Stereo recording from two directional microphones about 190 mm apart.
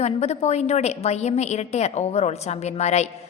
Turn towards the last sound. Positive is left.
turn(degrees=35)  # may be behind; listen again after turning